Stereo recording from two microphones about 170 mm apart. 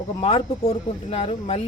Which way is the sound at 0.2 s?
35° left (ahead or behind).